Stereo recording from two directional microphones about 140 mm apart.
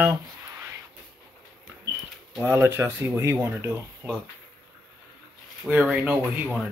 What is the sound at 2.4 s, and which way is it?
Speech, 15° right (ahead or behind).